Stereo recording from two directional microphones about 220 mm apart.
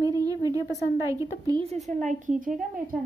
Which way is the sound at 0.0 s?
15° right (ahead or behind).